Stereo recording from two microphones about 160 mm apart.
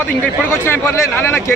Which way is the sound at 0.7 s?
15° left (ahead or behind).